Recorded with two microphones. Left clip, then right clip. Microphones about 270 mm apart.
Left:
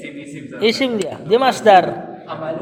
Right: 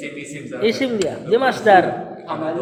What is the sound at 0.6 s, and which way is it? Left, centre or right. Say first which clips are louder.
A man's voice: left 2 dB; left.